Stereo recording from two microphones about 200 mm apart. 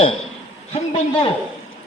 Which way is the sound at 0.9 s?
25° left (ahead or behind).